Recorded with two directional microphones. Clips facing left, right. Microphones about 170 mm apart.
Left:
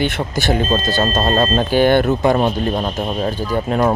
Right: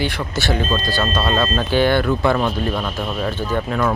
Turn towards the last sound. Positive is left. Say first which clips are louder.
# left 2 dB
turn(degrees=10)  # may be behind; listen again after turning